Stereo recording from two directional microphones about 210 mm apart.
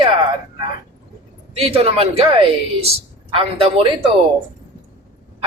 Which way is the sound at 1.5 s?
30° right (ahead or behind).